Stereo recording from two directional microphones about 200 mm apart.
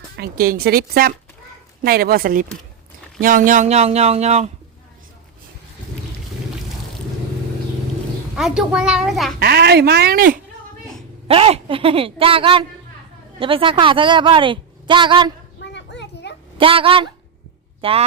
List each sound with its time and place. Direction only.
0.2 s speech: 45° right (ahead or behind)
8.4 s a child's voice: 5° right (ahead or behind)
9.4 s speech: 55° right (ahead or behind)
11.3 s a woman's voice: 30° right (ahead or behind)
15.6 s a sound: 60° left (ahead or behind)
16.6 s a woman's voice: 25° right (ahead or behind)